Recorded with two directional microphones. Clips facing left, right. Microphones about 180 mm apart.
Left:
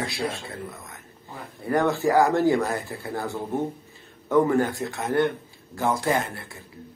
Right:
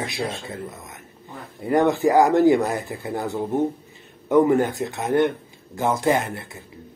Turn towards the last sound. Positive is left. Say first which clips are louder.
# right 4 dB
turn(degrees=-20)  # may be behind; listen again after turning